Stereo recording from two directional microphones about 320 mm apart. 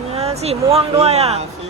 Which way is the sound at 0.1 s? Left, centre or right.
Centre.